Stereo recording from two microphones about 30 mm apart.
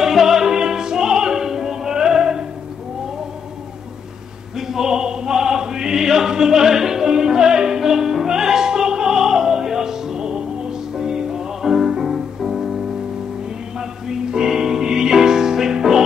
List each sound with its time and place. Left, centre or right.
0.0 s opera: centre
4.6 s music: centre